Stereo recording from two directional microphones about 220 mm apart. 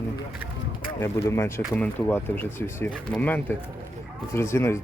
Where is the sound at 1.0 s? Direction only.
10° left (ahead or behind).